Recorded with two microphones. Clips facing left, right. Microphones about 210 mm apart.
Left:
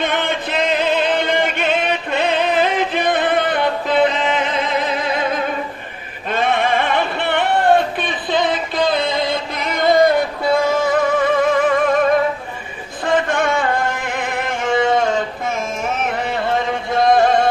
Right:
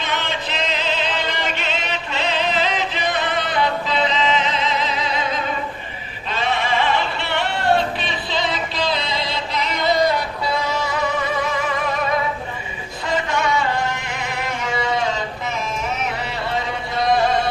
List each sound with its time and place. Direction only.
0.0 s music: 55° left (ahead or behind)
6.3 s a sound: 55° left (ahead or behind)
13.0 s music: 50° left (ahead or behind)